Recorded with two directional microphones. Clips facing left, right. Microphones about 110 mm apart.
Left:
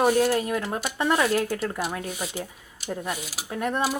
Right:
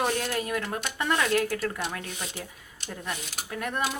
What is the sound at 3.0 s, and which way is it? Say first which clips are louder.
Speech: left 4 dB; 5° left (ahead or behind).